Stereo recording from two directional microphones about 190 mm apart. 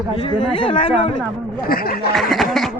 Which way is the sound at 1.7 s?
50° left (ahead or behind).